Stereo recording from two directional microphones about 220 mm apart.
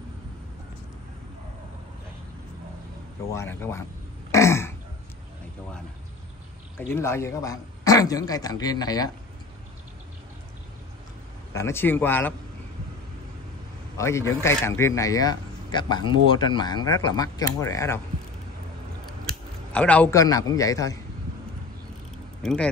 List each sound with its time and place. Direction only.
3.3 s speech: 10° left (ahead or behind)
4.3 s throat clearing: 15° left (ahead or behind)
6.9 s speech: 10° left (ahead or behind)
11.5 s speech: 10° left (ahead or behind)
13.9 s speech: 15° left (ahead or behind)
19.7 s speech: 5° left (ahead or behind)
22.4 s speech: centre (ahead or behind)